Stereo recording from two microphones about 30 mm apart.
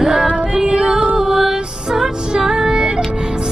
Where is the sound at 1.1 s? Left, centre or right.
Centre.